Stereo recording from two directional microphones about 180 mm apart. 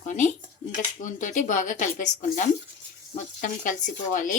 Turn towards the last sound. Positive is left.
turn(degrees=45)  # may be behind; listen again after turning